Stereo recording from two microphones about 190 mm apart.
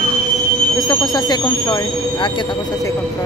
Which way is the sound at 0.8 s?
20° left (ahead or behind).